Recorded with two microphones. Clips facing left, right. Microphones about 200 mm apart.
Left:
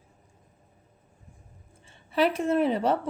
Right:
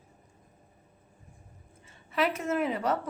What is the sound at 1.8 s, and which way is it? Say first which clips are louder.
A woman's voice: left 4 dB; 30° left (ahead or behind).